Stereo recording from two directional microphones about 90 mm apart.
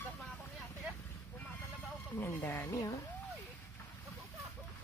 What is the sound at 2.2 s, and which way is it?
Speech, 30° left (ahead or behind).